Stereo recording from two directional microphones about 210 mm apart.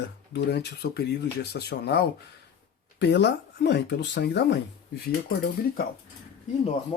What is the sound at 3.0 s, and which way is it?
Speech, 55° left (ahead or behind).